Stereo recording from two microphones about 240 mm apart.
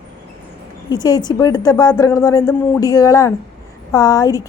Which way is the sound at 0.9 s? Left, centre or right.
Centre.